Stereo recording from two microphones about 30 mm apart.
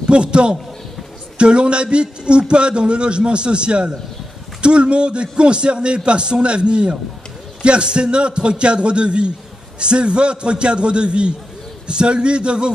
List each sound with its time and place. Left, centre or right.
0.1 s a man's voice: right